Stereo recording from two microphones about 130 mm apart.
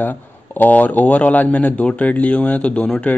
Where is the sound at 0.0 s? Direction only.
15° left (ahead or behind).